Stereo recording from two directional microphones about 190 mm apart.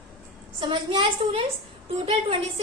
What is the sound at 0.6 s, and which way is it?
A woman's voice, 25° right (ahead or behind).